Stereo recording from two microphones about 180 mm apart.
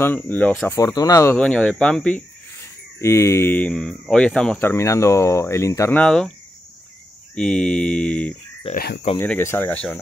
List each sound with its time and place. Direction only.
0.0 s speech: 10° left (ahead or behind)
0.7 s speech: 20° left (ahead or behind)
1.3 s speech: 5° left (ahead or behind)
3.0 s speech: 15° left (ahead or behind)
7.3 s speech: 5° left (ahead or behind)
8.7 s speech: 65° left (ahead or behind)
9.2 s speech: 15° left (ahead or behind)